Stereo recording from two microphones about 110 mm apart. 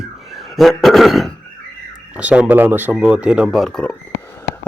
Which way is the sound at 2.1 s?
10° right (ahead or behind).